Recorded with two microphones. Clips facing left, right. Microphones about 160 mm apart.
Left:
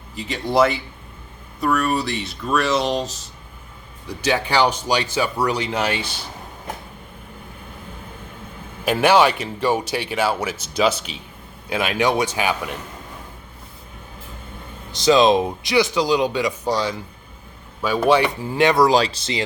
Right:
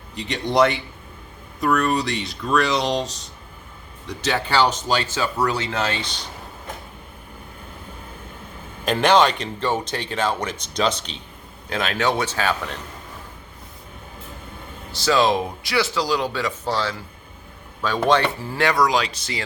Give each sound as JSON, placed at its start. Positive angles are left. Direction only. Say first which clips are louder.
{"t": 0.2, "sound": "speech", "louder": "left 1 dB", "side_deg": 0}
{"t": 8.8, "sound": "speech", "louder": "left 1 dB", "side_deg": 10}
{"t": 14.9, "sound": "speech", "louder": "left 4 dB", "side_deg": 20}